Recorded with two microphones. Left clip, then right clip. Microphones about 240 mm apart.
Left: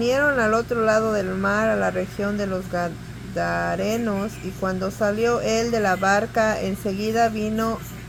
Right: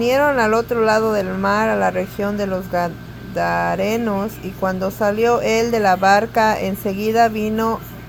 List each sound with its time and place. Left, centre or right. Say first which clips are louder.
0.0 s speech: right 4 dB; centre